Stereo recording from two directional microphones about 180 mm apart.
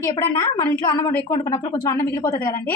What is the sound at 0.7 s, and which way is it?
A woman's voice, 20° left (ahead or behind).